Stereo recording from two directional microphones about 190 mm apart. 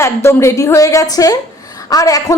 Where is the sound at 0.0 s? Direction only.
15° left (ahead or behind).